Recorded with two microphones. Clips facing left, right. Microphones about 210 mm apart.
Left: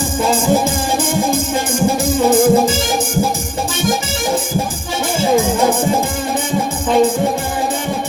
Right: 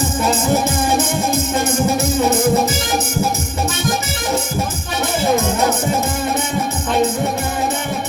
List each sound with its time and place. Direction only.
0.9 s music: 30° left (ahead or behind)